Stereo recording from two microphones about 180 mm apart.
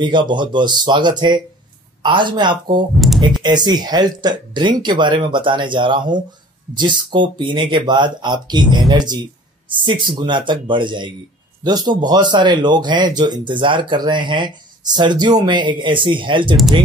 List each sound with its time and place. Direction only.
0.0 s speech: 25° right (ahead or behind)